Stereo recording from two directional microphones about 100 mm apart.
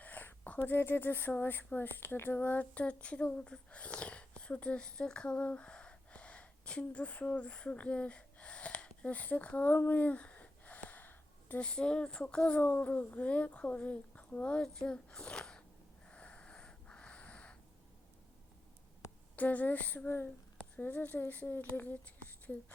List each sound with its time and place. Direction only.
0.0 s speech: 15° left (ahead or behind)
16.0 s wheeze: 10° left (ahead or behind)
19.4 s speech: 15° left (ahead or behind)